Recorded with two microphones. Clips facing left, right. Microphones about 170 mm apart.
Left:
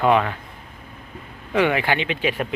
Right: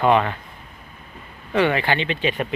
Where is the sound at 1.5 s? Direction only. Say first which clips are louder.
Even; 10° left (ahead or behind).